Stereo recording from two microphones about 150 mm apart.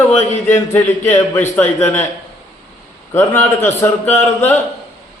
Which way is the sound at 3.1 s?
15° left (ahead or behind).